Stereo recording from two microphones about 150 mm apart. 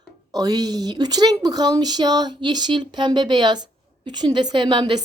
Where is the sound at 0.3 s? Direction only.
25° right (ahead or behind).